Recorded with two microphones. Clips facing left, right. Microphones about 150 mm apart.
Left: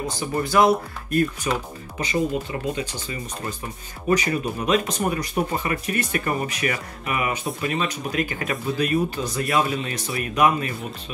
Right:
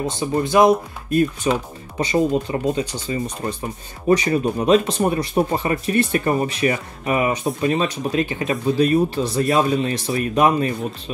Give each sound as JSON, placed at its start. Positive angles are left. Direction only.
{"t": 0.0, "sound": "speech", "side_deg": -20}